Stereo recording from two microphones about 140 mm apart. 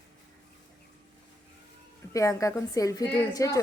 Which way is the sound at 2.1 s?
20° left (ahead or behind).